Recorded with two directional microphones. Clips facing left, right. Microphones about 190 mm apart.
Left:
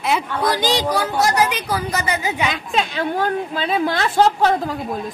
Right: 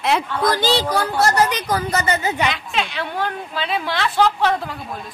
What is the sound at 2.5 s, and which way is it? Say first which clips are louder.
A woman's voice: left 2 dB; 40° left (ahead or behind).